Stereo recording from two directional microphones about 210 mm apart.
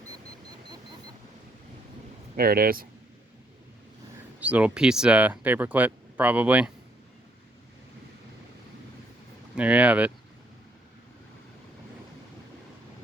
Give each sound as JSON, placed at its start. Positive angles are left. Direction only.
{"t": 2.3, "sound": "speech", "side_deg": -45}
{"t": 4.4, "sound": "speech", "side_deg": -5}
{"t": 9.6, "sound": "speech", "side_deg": -5}